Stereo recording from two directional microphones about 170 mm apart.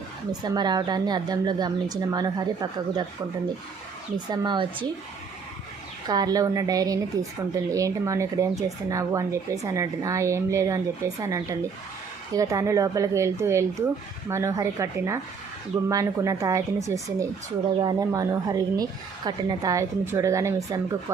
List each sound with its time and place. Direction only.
0.3 s a woman's voice: 25° right (ahead or behind)
4.3 s a woman's voice: 30° right (ahead or behind)
6.1 s a woman's voice: 20° right (ahead or behind)